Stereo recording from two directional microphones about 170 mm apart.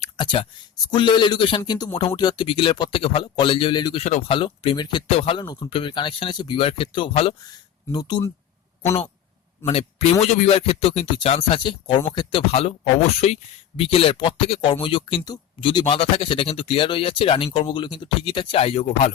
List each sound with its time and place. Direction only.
0.0 s a sound: 30° left (ahead or behind)
0.9 s speech: 30° left (ahead or behind)
9.6 s speech: 35° left (ahead or behind)